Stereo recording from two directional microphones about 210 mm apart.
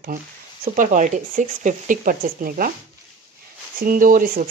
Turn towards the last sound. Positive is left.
turn(degrees=-40)  # may be behind; listen again after turning